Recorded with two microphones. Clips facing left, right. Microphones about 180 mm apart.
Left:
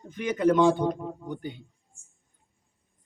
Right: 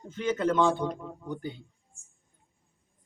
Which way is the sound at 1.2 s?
20° left (ahead or behind).